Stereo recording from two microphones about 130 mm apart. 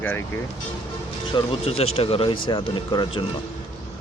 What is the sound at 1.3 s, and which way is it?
Speech, 50° left (ahead or behind).